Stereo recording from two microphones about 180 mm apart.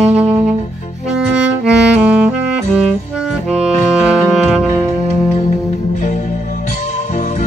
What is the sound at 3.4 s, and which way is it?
Music, 5° right (ahead or behind).